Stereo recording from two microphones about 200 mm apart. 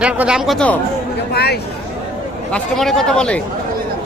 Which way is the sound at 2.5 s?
5° left (ahead or behind).